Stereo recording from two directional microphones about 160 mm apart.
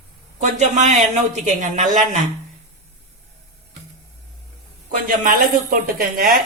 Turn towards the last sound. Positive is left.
turn(degrees=-60)  # may be behind; listen again after turning